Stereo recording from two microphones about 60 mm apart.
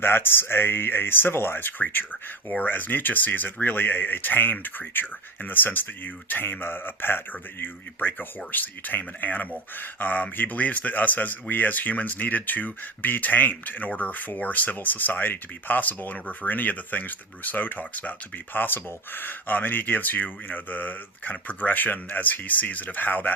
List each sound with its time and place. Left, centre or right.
0.0 s speech: left